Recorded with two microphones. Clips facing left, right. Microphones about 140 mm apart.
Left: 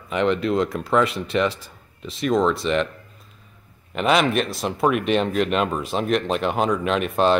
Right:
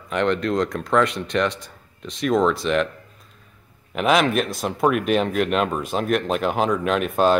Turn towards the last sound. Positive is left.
turn(degrees=0)  # may be behind; listen again after turning